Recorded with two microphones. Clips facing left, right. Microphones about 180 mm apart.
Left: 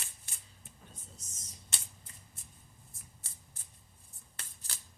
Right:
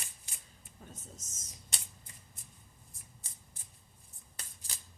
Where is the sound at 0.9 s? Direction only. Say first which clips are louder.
Right 4 dB; 45° right (ahead or behind).